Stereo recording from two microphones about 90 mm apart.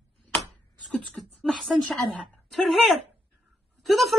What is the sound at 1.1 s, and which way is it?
A woman's voice, centre (ahead or behind).